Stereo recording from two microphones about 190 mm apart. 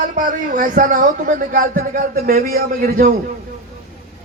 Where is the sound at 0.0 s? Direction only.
45° right (ahead or behind).